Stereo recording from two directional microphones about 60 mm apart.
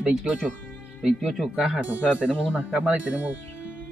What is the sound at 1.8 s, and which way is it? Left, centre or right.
Speech, right.